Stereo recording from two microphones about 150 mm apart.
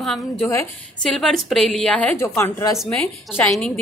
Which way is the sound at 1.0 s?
Centre (ahead or behind).